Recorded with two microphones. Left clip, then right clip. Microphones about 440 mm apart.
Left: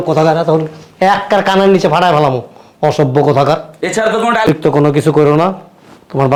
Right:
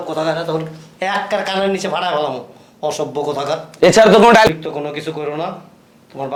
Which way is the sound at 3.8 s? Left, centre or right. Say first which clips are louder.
Right 5 dB; right.